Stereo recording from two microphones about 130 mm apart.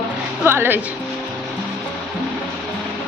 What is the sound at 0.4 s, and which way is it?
Speech, 15° right (ahead or behind).